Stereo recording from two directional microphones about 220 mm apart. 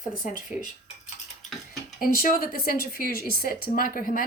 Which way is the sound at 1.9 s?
40° left (ahead or behind).